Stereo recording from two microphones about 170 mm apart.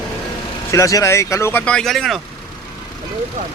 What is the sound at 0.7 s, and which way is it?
Speech, 20° left (ahead or behind).